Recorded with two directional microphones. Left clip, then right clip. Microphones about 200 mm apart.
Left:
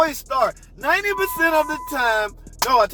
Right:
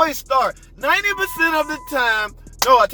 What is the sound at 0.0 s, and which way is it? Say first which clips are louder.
Speech: right 2 dB; 20° right (ahead or behind).